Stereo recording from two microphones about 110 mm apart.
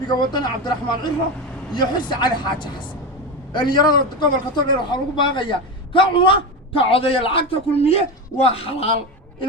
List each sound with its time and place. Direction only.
0.1 s a man's voice: 40° left (ahead or behind); by 8.9 s 60° left (ahead or behind)